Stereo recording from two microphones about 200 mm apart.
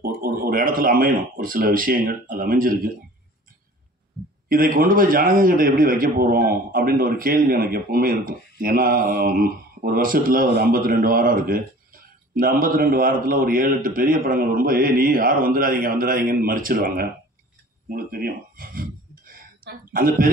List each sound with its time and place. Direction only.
0.0 s speech: 45° right (ahead or behind)
4.5 s a man's voice: 45° right (ahead or behind)
17.9 s a sound: 50° right (ahead or behind)